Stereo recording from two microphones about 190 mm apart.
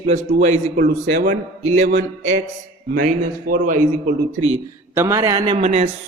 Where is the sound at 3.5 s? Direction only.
45° right (ahead or behind).